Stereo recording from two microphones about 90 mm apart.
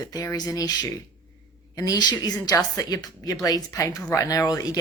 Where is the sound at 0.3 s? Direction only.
45° left (ahead or behind).